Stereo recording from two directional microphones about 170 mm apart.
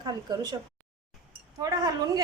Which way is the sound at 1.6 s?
20° right (ahead or behind).